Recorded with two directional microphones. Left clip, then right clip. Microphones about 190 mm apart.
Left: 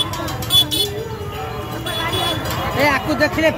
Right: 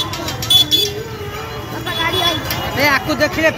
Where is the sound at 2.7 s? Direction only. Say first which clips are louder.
Right 2 dB; 15° left (ahead or behind).